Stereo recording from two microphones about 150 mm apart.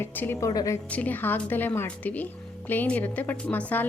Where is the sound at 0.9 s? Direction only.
10° left (ahead or behind).